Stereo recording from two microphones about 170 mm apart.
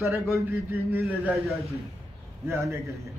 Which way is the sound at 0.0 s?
15° right (ahead or behind).